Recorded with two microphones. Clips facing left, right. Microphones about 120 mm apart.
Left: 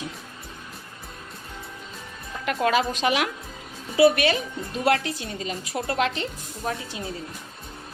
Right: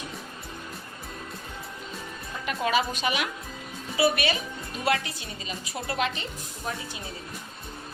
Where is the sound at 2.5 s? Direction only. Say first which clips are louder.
Left 4 dB; 85° left.